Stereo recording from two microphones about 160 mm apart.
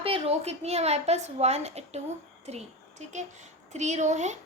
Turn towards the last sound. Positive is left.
turn(degrees=-45)  # may be behind; listen again after turning